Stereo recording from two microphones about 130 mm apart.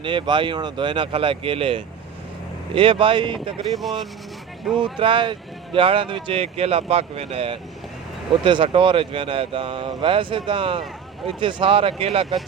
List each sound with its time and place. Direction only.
0.0 s speech: 40° right (ahead or behind)
4.8 s speech: 40° right (ahead or behind)